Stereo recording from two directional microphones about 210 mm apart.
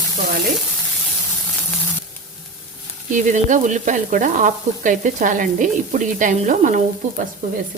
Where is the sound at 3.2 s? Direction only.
35° right (ahead or behind).